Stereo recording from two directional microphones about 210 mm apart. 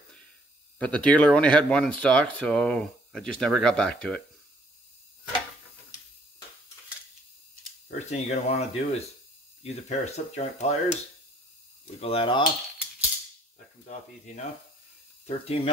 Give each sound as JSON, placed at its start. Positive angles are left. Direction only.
{"t": 0.7, "sound": "speech", "side_deg": 5}
{"t": 8.1, "sound": "speech", "side_deg": 30}
{"t": 12.0, "sound": "speech", "side_deg": 25}
{"t": 13.8, "sound": "speech", "side_deg": 35}